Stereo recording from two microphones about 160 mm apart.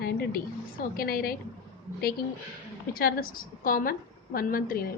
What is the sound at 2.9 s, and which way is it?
A woman's voice, 70° left (ahead or behind).